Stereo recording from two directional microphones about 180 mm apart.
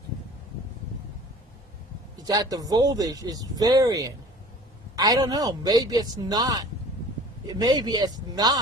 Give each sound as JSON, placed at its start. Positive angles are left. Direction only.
{"t": 2.2, "sound": "speech", "side_deg": -20}